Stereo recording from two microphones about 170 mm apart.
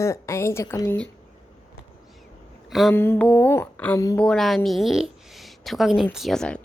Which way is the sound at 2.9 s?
15° left (ahead or behind).